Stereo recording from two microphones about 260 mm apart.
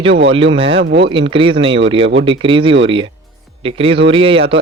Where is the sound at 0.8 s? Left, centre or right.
Right.